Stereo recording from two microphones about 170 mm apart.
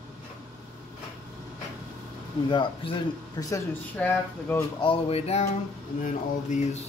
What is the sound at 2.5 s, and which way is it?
Speech, 30° left (ahead or behind).